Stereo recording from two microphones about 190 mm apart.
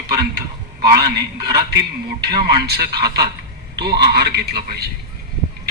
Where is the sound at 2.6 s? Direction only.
55° right (ahead or behind).